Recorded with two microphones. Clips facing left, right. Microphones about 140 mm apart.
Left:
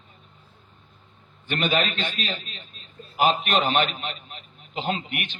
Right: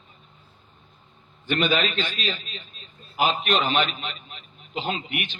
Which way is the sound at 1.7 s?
50° left (ahead or behind).